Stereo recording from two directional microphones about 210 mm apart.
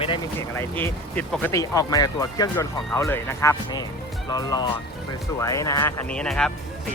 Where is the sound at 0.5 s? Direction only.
10° left (ahead or behind).